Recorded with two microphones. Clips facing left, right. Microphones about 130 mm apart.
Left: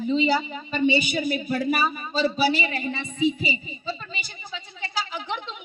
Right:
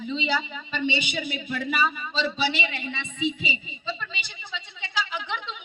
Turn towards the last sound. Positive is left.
turn(degrees=40)  # may be behind; listen again after turning